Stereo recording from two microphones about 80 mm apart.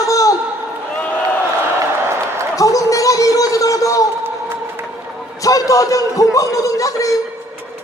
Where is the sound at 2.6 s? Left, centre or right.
Left.